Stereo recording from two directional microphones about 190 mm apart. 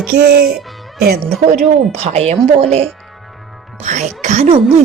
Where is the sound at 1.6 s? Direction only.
35° right (ahead or behind).